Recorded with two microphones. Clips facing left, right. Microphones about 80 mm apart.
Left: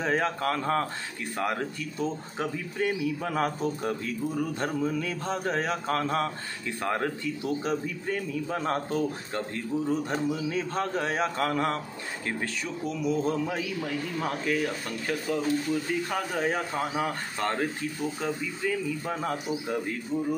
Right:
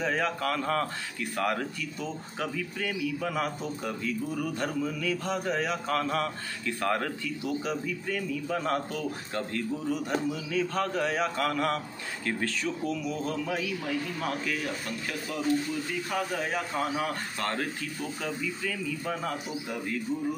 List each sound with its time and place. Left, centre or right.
0.0 s a man's voice: left
7.4 s a man's voice: left
16.1 s a man's voice: left